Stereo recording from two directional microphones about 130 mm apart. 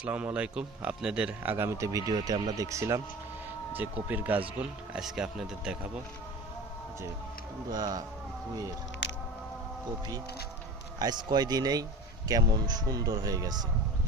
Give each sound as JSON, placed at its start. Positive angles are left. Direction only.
{"t": 0.0, "sound": "speech", "side_deg": -10}
{"t": 3.7, "sound": "speech", "side_deg": -15}
{"t": 7.7, "sound": "a man's voice", "side_deg": -30}
{"t": 11.0, "sound": "a man's voice", "side_deg": -30}